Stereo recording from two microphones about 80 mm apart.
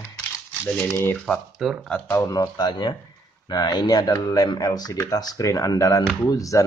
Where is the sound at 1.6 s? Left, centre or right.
Centre.